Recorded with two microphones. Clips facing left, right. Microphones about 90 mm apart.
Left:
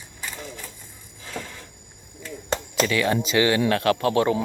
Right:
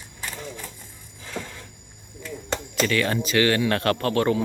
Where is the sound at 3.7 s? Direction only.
5° left (ahead or behind).